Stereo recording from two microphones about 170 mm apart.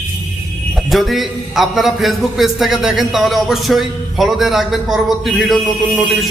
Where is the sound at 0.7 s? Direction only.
Centre (ahead or behind).